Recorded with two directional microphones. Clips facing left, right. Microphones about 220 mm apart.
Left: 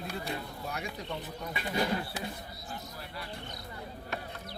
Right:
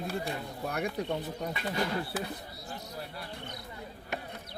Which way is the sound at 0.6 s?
60° right (ahead or behind).